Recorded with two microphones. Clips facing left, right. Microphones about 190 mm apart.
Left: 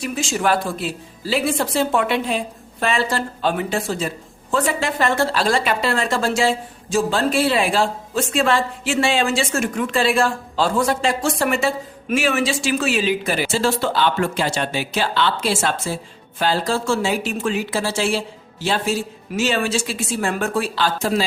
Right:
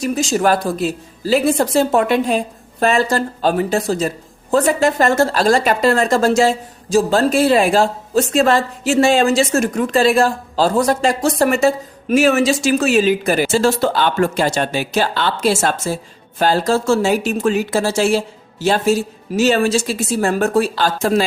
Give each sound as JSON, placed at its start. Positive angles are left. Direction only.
{"t": 0.0, "sound": "a woman's voice", "side_deg": -40}